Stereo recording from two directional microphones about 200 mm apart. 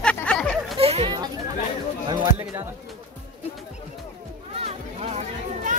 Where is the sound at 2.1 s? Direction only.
15° right (ahead or behind).